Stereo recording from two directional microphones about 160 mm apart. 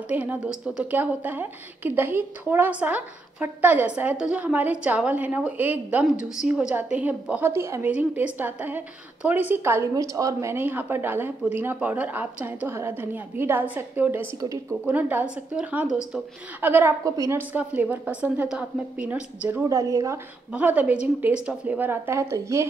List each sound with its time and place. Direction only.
0.1 s a woman's voice: 10° right (ahead or behind)
19.7 s speech: 20° right (ahead or behind)
20.5 s a woman's voice: 10° right (ahead or behind)